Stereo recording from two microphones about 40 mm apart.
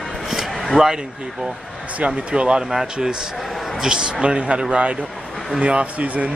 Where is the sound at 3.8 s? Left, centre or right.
Centre.